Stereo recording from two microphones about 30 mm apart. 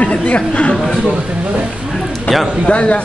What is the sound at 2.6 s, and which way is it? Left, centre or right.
Speech, left.